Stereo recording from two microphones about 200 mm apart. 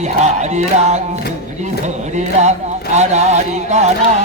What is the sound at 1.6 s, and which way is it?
Speech, 35° right (ahead or behind).